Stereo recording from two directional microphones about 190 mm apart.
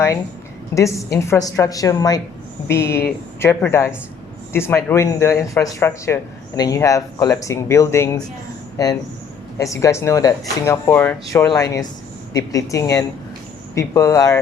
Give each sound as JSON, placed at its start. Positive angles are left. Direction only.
{"t": 0.7, "sound": "speech", "side_deg": 15}